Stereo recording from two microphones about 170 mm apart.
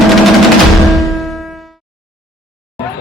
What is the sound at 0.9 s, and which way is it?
Music, centre (ahead or behind).